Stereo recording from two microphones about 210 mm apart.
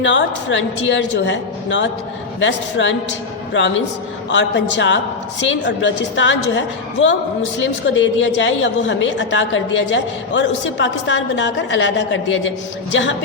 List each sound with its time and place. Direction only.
0.0 s a woman's voice: 60° left (ahead or behind)
4.3 s a woman's voice: 60° left (ahead or behind)
7.6 s a woman's voice: 65° left (ahead or behind)